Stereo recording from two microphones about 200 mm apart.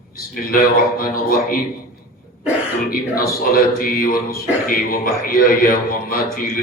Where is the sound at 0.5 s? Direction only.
45° left (ahead or behind).